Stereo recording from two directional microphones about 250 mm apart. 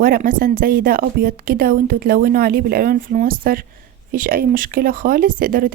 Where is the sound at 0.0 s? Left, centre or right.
Right.